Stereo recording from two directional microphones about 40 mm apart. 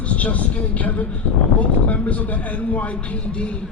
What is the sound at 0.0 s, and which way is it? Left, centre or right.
A man's voice, left.